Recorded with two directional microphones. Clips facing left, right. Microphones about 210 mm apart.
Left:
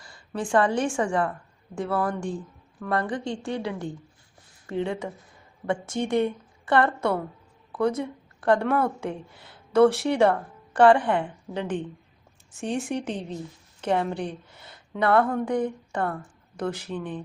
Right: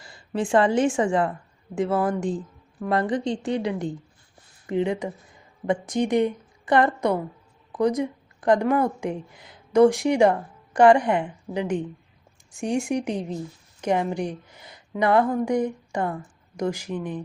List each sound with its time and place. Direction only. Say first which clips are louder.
0.0 s a woman's voice: right 4 dB; 25° right (ahead or behind)